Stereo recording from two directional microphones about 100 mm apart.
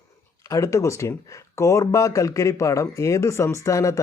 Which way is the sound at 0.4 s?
30° left (ahead or behind).